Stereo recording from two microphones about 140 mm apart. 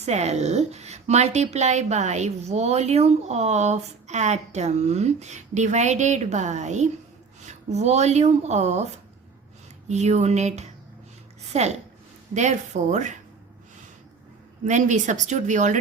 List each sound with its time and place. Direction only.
0.0 s a woman's voice: 50° right (ahead or behind)
9.9 s a woman's voice: 50° right (ahead or behind)
14.6 s speech: 60° right (ahead or behind)